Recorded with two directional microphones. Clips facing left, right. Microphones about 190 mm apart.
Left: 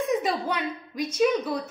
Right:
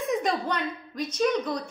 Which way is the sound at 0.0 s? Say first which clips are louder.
Left 1 dB; centre (ahead or behind).